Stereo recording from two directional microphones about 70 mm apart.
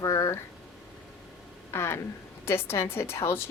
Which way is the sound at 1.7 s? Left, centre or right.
Left.